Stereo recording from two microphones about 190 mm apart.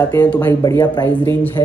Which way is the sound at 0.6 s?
20° left (ahead or behind).